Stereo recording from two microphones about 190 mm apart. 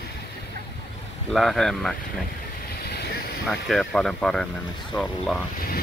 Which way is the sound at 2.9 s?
55° left (ahead or behind).